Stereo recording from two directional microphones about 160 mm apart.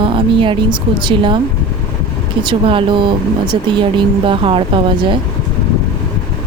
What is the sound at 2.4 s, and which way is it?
Speech, 30° right (ahead or behind).